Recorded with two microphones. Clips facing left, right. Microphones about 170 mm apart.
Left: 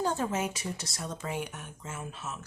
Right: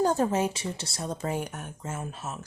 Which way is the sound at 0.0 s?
40° right (ahead or behind).